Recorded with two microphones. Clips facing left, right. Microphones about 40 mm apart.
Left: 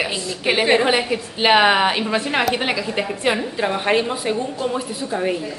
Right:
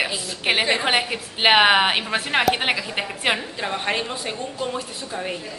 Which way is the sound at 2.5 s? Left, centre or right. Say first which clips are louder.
Left 1 dB; right.